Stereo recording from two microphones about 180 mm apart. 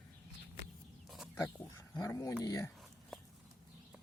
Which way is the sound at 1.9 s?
20° left (ahead or behind).